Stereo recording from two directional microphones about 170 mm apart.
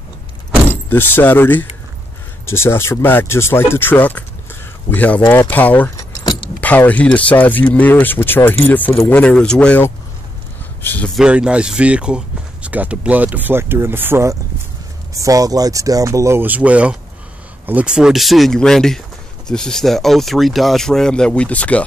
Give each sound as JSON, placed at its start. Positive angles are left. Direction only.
{"t": 0.7, "sound": "speech", "side_deg": 10}
{"t": 5.9, "sound": "keys jangling", "side_deg": 25}
{"t": 6.6, "sound": "speech", "side_deg": 10}
{"t": 11.1, "sound": "speech", "side_deg": -5}